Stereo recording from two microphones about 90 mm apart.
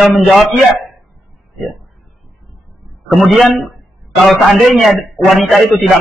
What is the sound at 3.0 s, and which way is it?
A man's voice, centre (ahead or behind).